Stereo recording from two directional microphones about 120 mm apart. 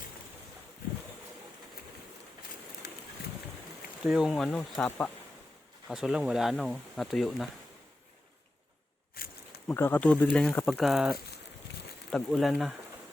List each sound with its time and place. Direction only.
4.0 s speech: 5° right (ahead or behind); by 5.1 s 15° left (ahead or behind)
5.9 s speech: 5° right (ahead or behind)
9.6 s speech: 15° left (ahead or behind); by 12.7 s centre (ahead or behind)